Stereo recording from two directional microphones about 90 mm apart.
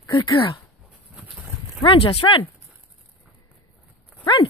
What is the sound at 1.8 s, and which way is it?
Speech, 70° left (ahead or behind).